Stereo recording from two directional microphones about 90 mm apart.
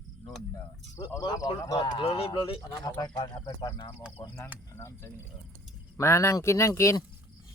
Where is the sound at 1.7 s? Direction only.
70° left (ahead or behind).